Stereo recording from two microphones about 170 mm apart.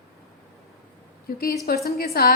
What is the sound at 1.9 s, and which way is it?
Speech, 65° left (ahead or behind).